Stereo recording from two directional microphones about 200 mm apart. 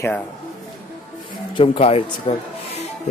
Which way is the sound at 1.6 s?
30° left (ahead or behind).